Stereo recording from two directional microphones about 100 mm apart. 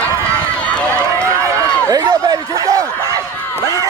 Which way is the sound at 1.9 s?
40° right (ahead or behind).